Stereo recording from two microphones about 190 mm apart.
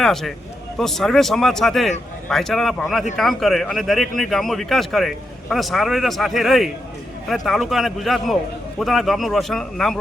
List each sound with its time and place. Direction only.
0.0 s a man's voice: centre (ahead or behind)